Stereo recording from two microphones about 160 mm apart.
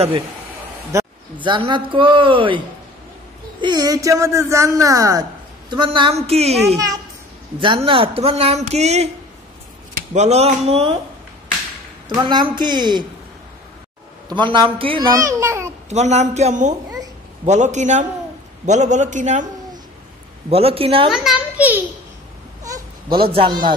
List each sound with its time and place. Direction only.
0.9 s a man's voice: 20° right (ahead or behind)
1.4 s speech: 30° right (ahead or behind)
3.6 s speech: 25° right (ahead or behind)
5.7 s speech: 30° right (ahead or behind)
10.1 s speech: 45° right (ahead or behind)
12.2 s speech: 30° right (ahead or behind)
14.3 s speech: 30° right (ahead or behind)
15.1 s a sound: 15° right (ahead or behind)
15.9 s a man's voice: 45° right (ahead or behind)
20.4 s speech: 40° right (ahead or behind)
21.1 s a child's voice: 5° right (ahead or behind)
23.3 s speech: 35° right (ahead or behind)